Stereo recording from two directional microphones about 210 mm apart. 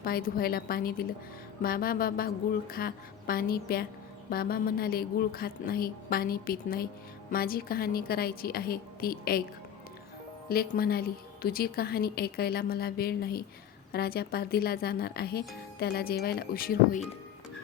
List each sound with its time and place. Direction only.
0.0 s speech: 45° left (ahead or behind)
10.5 s speech: 45° left (ahead or behind)